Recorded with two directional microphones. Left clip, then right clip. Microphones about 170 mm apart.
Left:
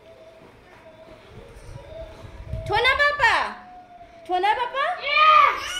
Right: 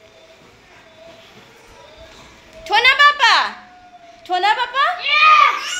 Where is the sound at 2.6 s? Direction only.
10° left (ahead or behind).